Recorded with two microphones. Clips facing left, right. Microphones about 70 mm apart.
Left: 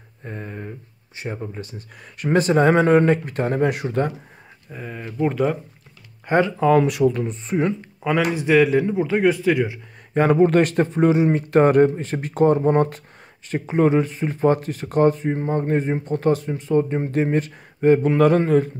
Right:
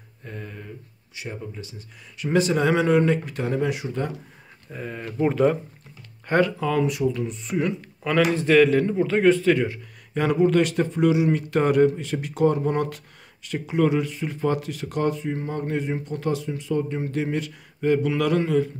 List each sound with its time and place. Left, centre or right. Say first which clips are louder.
0.2 s a sound: left 4 dB; left
1.1 s speech: left 5 dB; left
4.6 s speech: even; centre
6.2 s speech: left 2 dB; centre
6.8 s speech: left 5 dB; left
7.2 s speech: left 3 dB; left
8.3 s speech: left 1 dB; centre
10.1 s speech: left 4 dB; left